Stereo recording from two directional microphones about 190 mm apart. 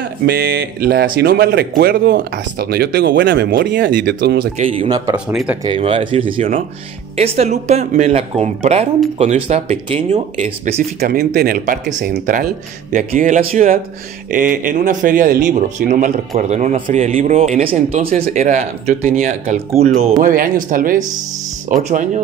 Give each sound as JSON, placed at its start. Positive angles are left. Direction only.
{"t": 0.0, "sound": "speech", "side_deg": -55}
{"t": 4.6, "sound": "speech", "side_deg": -25}
{"t": 5.1, "sound": "speech", "side_deg": -5}
{"t": 5.6, "sound": "speech", "side_deg": -30}
{"t": 11.0, "sound": "speech", "side_deg": -55}
{"t": 20.0, "sound": "speech", "side_deg": -35}
{"t": 20.2, "sound": "speech", "side_deg": -45}